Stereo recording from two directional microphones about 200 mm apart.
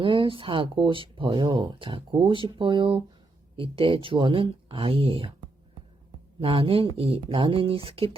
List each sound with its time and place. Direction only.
0.0 s speech: 25° right (ahead or behind)
6.4 s speech: 25° right (ahead or behind)